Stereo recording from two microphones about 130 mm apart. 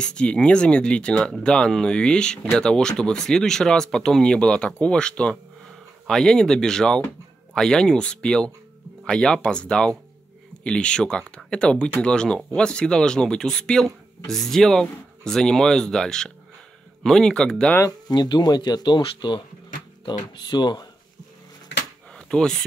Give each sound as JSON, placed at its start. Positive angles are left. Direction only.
{"t": 0.0, "sound": "speech", "side_deg": 5}
{"t": 17.7, "sound": "speech", "side_deg": 30}
{"t": 22.1, "sound": "speech", "side_deg": 5}